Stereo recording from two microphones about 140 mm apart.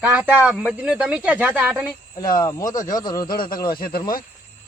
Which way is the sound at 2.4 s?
25° left (ahead or behind).